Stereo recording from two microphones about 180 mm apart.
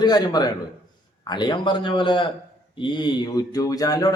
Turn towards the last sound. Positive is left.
turn(degrees=20)  # may be behind; listen again after turning